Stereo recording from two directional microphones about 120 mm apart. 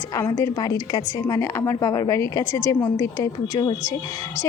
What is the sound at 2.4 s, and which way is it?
Speech, 45° right (ahead or behind).